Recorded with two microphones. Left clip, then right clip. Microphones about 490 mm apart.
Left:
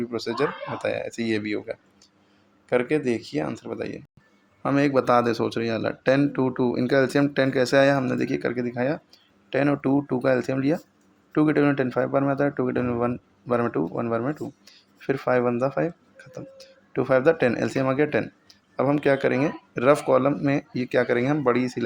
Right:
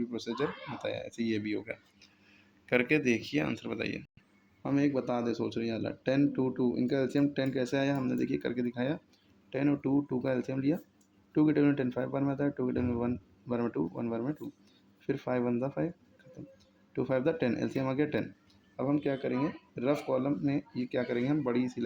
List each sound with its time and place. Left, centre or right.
0.0 s speech: right